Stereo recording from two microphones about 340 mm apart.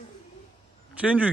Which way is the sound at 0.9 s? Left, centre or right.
Centre.